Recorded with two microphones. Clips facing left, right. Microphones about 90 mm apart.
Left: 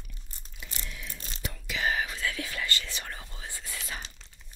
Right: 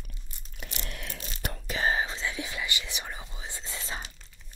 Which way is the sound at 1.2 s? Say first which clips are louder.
Right 3 dB; 45° right (ahead or behind).